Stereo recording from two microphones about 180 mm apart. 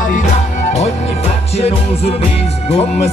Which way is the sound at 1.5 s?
35° left (ahead or behind).